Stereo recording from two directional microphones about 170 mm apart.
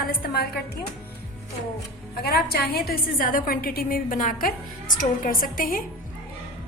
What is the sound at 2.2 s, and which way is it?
A woman's voice, 65° left (ahead or behind).